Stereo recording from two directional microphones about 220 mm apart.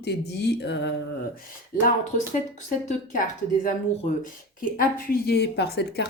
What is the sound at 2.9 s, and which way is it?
Speech, 35° left (ahead or behind).